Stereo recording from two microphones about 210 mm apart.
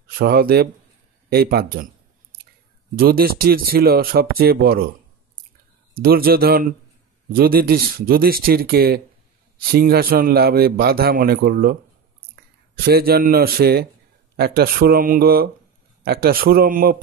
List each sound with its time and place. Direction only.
0.2 s a man's voice: 45° right (ahead or behind)
3.0 s a man's voice: 45° right (ahead or behind)
6.0 s a man's voice: 45° right (ahead or behind)
12.8 s a man's voice: 45° right (ahead or behind)